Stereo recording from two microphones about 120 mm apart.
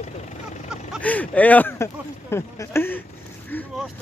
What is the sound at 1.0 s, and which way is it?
Speech, 15° left (ahead or behind).